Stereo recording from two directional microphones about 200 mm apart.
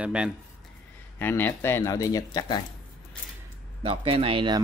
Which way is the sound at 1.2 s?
10° left (ahead or behind).